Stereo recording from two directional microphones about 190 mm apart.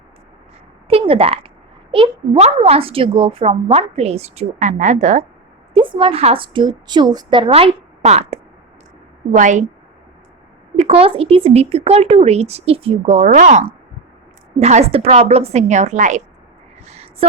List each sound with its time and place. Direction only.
0.9 s a woman's voice: 30° right (ahead or behind)
5.7 s a woman's voice: 25° right (ahead or behind)
10.8 s a woman's voice: 30° right (ahead or behind)
16.8 s a sound: 35° right (ahead or behind)